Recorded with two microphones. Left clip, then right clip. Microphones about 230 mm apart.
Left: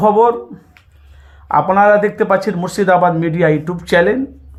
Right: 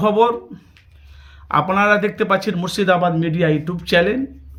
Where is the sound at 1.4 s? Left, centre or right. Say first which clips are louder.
Left 5 dB; centre.